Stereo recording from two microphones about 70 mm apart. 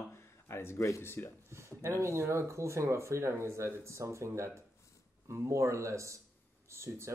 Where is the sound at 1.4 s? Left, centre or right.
Right.